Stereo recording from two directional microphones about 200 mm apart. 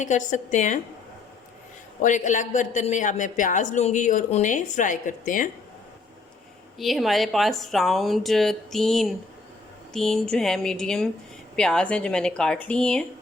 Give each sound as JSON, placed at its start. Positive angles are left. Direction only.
{"t": 0.0, "sound": "a woman's voice", "side_deg": 40}
{"t": 2.0, "sound": "a woman's voice", "side_deg": 40}
{"t": 6.7, "sound": "speech", "side_deg": 0}